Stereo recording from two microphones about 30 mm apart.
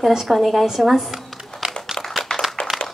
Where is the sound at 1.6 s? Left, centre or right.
Right.